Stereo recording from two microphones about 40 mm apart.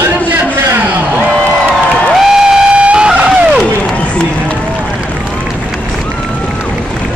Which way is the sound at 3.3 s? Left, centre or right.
Centre.